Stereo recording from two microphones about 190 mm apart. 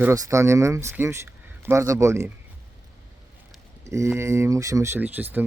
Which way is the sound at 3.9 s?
15° right (ahead or behind).